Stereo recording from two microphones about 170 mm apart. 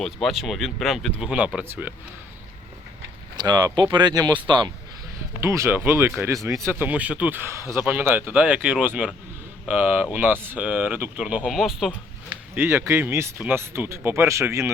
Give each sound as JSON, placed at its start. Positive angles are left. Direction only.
{"t": 0.0, "sound": "speech", "side_deg": 0}
{"t": 3.3, "sound": "speech", "side_deg": -25}
{"t": 5.4, "sound": "speech", "side_deg": -15}
{"t": 12.5, "sound": "speech", "side_deg": -15}